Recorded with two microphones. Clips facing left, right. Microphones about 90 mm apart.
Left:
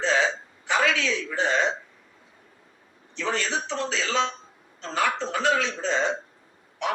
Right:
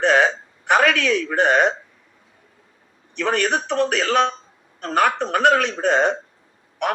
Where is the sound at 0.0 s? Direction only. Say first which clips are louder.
Right 7 dB; 60° right (ahead or behind).